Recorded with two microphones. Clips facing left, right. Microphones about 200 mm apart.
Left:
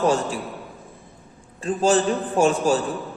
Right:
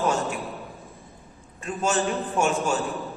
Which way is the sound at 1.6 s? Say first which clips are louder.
Left 6 dB; 35° left (ahead or behind).